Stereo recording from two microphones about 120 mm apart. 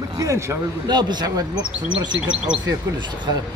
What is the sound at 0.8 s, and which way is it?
Speech, 35° right (ahead or behind).